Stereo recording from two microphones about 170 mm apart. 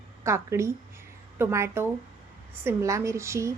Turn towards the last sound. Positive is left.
turn(degrees=-15)  # may be behind; listen again after turning